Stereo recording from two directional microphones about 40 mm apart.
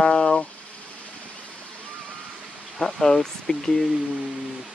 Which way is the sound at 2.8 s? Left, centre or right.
Centre.